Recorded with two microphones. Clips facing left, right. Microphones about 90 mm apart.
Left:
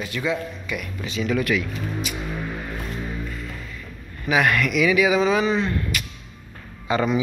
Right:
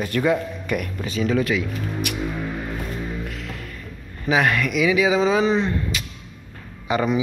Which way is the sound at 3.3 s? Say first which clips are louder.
Right 1 dB; 90° right.